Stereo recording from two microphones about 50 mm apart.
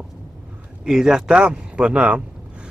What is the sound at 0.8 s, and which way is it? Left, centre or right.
Speech, centre.